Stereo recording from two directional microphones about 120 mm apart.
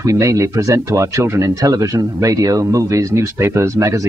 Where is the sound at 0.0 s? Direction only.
25° right (ahead or behind).